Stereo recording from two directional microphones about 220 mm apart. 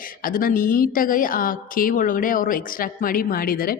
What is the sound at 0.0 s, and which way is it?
A woman's voice, 40° left (ahead or behind).